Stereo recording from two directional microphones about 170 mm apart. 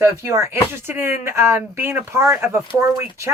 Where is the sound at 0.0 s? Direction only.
15° right (ahead or behind).